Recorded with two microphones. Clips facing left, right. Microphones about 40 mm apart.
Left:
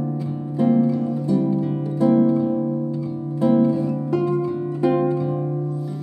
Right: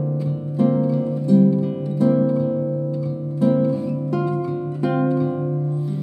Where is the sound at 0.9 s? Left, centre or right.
Centre.